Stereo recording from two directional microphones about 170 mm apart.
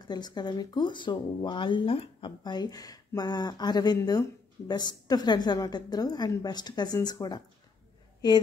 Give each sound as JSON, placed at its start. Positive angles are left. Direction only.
{"t": 0.0, "sound": "speech", "side_deg": 25}